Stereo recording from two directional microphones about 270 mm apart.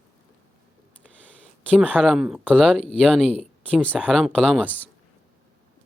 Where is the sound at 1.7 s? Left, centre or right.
Centre.